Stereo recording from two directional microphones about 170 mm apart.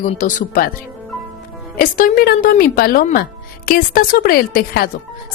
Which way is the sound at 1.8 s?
50° left (ahead or behind).